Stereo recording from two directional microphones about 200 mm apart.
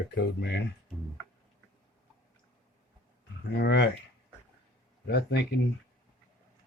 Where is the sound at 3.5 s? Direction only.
55° left (ahead or behind).